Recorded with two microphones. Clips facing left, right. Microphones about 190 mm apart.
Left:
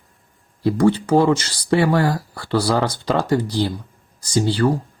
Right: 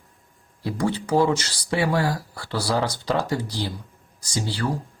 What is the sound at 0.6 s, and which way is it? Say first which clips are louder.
Speech: left 9 dB; 55° left (ahead or behind).